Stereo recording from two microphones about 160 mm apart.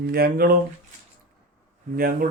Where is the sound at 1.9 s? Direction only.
65° right (ahead or behind).